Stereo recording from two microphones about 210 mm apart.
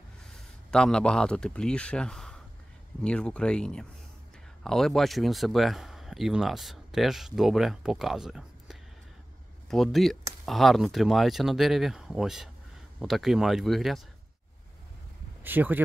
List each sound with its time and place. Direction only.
0.3 s a man's voice: 5° left (ahead or behind)
15.4 s speech: 10° right (ahead or behind)